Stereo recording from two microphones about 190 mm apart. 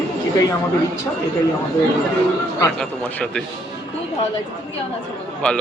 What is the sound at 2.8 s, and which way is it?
Speech, 5° left (ahead or behind).